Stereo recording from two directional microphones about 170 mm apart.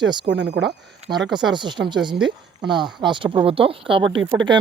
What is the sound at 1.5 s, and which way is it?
Speech, 25° right (ahead or behind).